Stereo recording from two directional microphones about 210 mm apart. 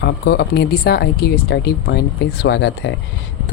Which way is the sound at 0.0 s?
50° left (ahead or behind).